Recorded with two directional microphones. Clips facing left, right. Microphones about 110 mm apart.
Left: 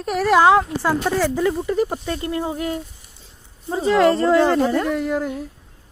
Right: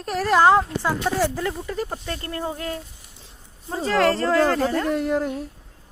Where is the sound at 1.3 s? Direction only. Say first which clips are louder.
Left 7 dB; 15° left (ahead or behind).